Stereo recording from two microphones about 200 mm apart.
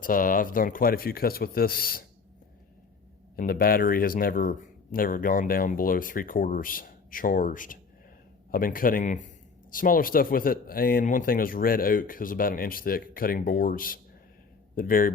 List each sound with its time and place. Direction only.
0.0 s speech: 45° left (ahead or behind)
3.3 s speech: 45° left (ahead or behind)